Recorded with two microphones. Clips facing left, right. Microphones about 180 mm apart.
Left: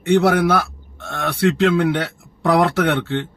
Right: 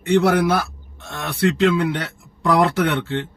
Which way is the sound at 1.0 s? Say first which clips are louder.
Left 2 dB; 50° left (ahead or behind).